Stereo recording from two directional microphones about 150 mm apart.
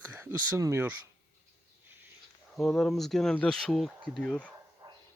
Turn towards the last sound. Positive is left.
turn(degrees=-25)  # may be behind; listen again after turning